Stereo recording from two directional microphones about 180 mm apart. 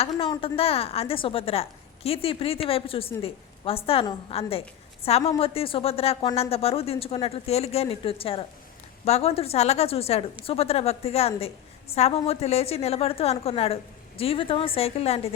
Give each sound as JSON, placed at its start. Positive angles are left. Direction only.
{"t": 0.2, "sound": "a woman's voice", "side_deg": 30}